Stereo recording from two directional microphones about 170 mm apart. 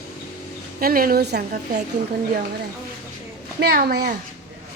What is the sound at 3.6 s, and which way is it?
Speech, 70° right (ahead or behind).